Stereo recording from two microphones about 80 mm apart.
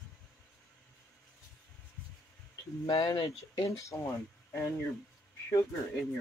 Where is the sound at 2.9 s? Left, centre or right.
Left.